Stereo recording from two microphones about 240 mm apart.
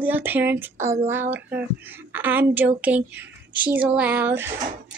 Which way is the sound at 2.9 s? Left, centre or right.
Right.